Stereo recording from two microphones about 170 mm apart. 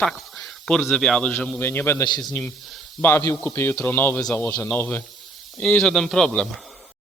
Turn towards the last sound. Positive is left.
turn(degrees=5)  # may be behind; listen again after turning